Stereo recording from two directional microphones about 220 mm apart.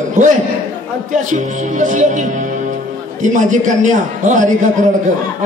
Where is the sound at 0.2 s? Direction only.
30° right (ahead or behind).